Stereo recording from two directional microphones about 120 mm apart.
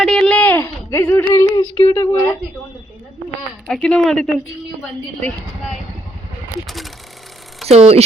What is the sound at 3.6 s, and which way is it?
Speech, 5° left (ahead or behind).